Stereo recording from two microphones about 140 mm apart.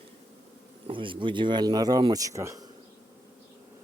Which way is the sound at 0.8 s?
35° right (ahead or behind).